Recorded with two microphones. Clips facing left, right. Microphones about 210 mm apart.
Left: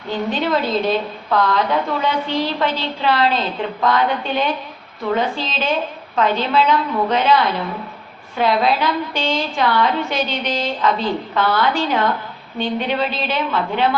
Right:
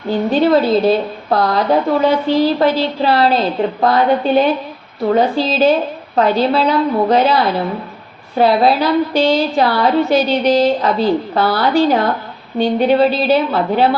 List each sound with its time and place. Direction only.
0.3 s a woman's voice: 35° right (ahead or behind)